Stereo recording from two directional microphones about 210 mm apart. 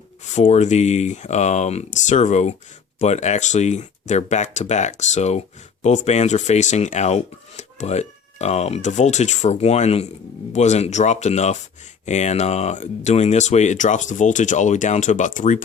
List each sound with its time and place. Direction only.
0.3 s speech: 35° left (ahead or behind)